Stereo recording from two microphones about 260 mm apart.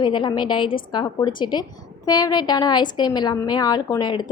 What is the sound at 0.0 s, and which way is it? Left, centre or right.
A woman's voice, centre.